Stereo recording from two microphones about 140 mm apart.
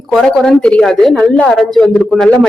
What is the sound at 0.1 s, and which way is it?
A woman's voice, 5° left (ahead or behind).